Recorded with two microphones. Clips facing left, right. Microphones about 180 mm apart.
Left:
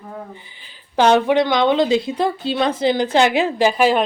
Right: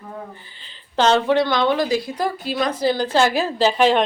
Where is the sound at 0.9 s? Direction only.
15° left (ahead or behind).